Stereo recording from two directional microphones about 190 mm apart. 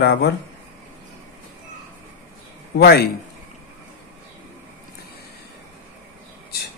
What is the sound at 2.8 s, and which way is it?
Speech, 55° left (ahead or behind).